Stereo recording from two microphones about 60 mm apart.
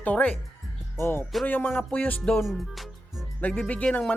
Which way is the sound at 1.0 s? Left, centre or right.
Left.